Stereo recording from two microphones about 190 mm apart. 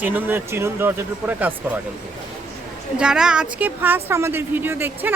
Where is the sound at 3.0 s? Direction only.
5° right (ahead or behind).